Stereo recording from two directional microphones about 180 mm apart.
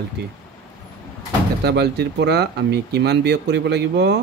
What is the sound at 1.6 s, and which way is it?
Speech, 65° right (ahead or behind).